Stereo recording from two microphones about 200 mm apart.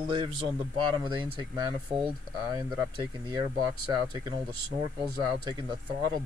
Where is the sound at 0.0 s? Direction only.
25° right (ahead or behind).